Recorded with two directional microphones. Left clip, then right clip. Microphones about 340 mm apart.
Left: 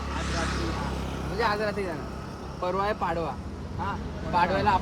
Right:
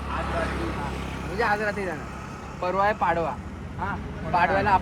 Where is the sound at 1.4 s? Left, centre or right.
Centre.